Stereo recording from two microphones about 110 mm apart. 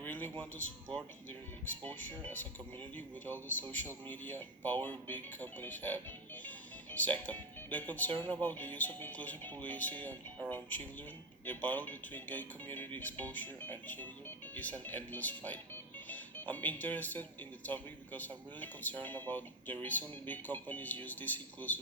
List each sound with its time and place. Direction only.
0.0 s speech: 15° left (ahead or behind)
3.6 s speech: 15° left (ahead or behind)